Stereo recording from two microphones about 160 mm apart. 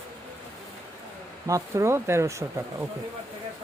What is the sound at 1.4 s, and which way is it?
Speech, 20° right (ahead or behind).